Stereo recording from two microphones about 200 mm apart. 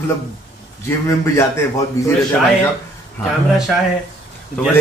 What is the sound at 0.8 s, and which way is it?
Speech, 15° left (ahead or behind).